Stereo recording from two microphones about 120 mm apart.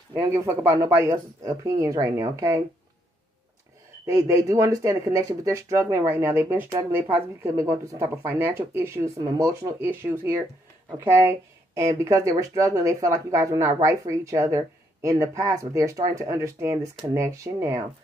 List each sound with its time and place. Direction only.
0.2 s speech: 25° right (ahead or behind)
4.0 s speech: 25° right (ahead or behind)
9.8 s speech: 15° right (ahead or behind)